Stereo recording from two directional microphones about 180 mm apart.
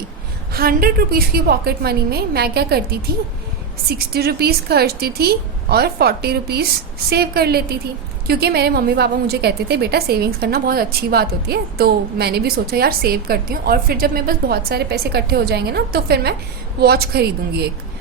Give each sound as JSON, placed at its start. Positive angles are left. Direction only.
{"t": 0.5, "sound": "a woman's voice", "side_deg": -55}